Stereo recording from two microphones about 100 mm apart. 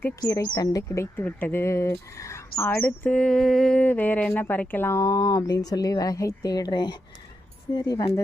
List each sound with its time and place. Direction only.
0.2 s speech: 35° left (ahead or behind)
0.9 s speech: 25° left (ahead or behind)